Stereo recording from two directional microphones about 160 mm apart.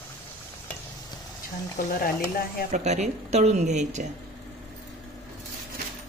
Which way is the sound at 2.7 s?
45° right (ahead or behind).